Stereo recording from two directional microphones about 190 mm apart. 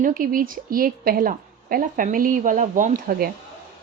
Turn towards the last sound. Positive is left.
turn(degrees=-50)  # may be behind; listen again after turning